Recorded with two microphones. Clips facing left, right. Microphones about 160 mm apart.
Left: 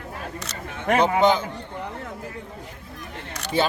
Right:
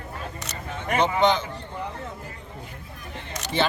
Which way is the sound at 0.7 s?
65° left (ahead or behind).